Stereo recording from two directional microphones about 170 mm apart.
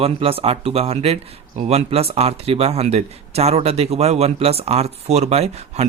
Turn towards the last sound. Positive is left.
turn(degrees=-40)  # may be behind; listen again after turning